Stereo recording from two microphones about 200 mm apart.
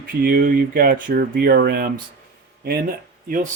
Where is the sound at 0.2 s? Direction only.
50° right (ahead or behind).